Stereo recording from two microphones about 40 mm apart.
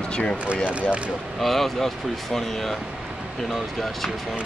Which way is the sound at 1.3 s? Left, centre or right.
Centre.